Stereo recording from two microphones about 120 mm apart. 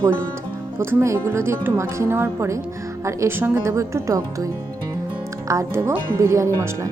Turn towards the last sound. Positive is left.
turn(degrees=-25)  # may be behind; listen again after turning